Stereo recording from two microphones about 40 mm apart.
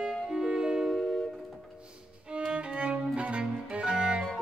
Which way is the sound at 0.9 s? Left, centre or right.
Centre.